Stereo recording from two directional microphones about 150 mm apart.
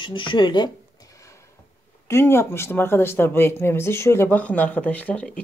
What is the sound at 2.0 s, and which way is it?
Speech, 15° left (ahead or behind).